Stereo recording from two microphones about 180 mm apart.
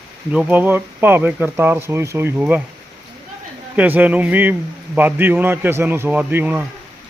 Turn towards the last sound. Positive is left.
turn(degrees=-10)  # may be behind; listen again after turning